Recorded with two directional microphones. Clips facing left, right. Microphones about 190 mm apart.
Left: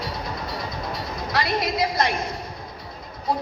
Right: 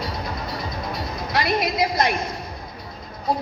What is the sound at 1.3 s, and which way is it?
Speech, 20° right (ahead or behind).